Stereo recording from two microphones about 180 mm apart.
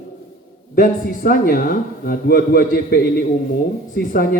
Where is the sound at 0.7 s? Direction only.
55° left (ahead or behind).